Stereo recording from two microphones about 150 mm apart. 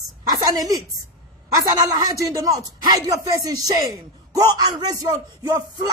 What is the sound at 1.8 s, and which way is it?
A woman's voice, 20° right (ahead or behind).